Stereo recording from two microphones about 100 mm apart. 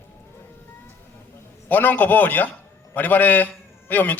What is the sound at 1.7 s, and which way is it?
A man's voice, 15° left (ahead or behind).